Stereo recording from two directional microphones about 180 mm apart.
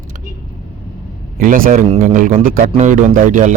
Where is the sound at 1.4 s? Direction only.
50° right (ahead or behind).